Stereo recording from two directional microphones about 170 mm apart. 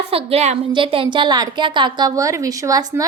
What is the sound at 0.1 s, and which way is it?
A woman's voice, 35° right (ahead or behind).